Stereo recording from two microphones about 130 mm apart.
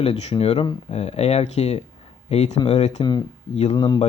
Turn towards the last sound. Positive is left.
turn(degrees=35)  # may be behind; listen again after turning